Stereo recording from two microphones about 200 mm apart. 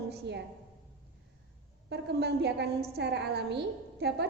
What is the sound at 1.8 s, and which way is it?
A woman's voice, 55° right (ahead or behind).